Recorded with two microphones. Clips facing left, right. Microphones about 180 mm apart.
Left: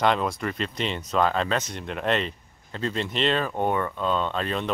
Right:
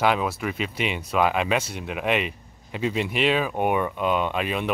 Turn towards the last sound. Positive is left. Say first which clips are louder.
# right 2 dB
turn(degrees=-10)  # may be behind; listen again after turning